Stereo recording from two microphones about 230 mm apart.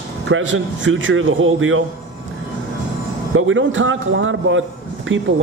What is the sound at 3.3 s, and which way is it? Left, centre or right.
A man's voice, right.